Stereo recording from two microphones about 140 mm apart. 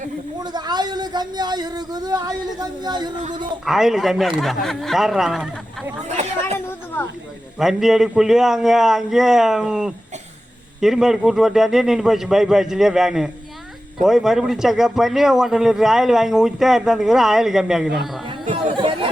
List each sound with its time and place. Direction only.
0.3 s speech: 30° right (ahead or behind)
3.7 s a man's voice: centre (ahead or behind)
6.0 s speech: 55° right (ahead or behind)
6.7 s a sound: 15° left (ahead or behind)
7.6 s a man's voice: centre (ahead or behind)
18.6 s chatter: 40° right (ahead or behind)